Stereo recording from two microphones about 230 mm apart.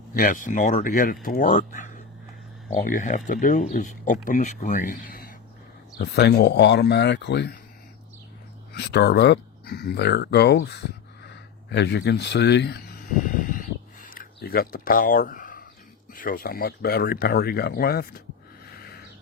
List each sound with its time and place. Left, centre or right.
0.1 s speech: left
8.7 s speech: left
14.0 s a sound: left
16.1 s speech: left